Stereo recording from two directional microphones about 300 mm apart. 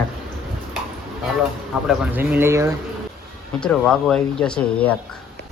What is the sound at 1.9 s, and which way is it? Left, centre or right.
Speech, centre.